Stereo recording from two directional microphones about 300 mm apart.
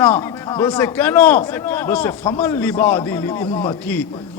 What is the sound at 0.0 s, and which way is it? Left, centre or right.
Speech, centre.